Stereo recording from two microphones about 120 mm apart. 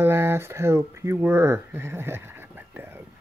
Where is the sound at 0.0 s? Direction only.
20° right (ahead or behind).